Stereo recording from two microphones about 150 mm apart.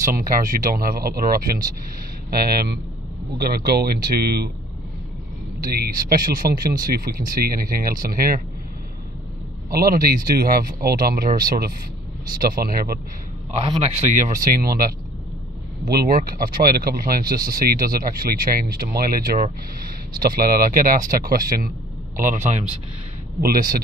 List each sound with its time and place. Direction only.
0.0 s speech: 70° right (ahead or behind)
2.3 s speech: 90° right
5.6 s speech: 80° right
9.7 s speech: 80° right
13.7 s a man's voice: 45° right (ahead or behind)
14.4 s speech: 75° right (ahead or behind); by 22.7 s 50° right (ahead or behind)
23.4 s speech: 75° right (ahead or behind)